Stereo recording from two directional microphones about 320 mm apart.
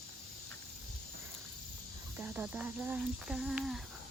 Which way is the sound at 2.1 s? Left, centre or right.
Centre.